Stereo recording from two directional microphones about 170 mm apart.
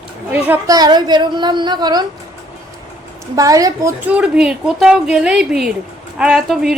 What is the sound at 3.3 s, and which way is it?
Speech, 20° right (ahead or behind).